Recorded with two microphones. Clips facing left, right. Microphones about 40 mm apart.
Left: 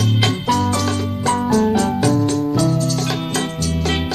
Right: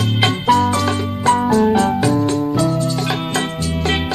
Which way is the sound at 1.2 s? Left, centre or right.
Centre.